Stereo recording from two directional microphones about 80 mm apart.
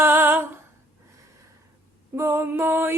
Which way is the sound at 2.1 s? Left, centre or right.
Right.